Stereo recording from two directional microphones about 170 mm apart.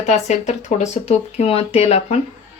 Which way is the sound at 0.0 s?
40° left (ahead or behind).